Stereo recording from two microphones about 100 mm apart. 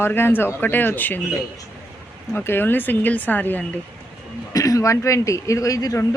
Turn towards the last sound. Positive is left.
turn(degrees=35)  # may be behind; listen again after turning